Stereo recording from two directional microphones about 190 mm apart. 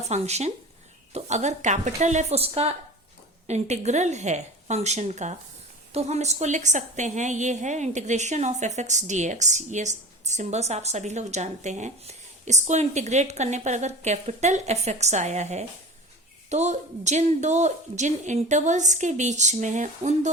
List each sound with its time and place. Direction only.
0.0 s a woman's voice: 35° right (ahead or behind)